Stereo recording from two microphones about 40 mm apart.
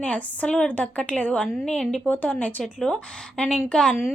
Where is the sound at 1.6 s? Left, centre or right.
Centre.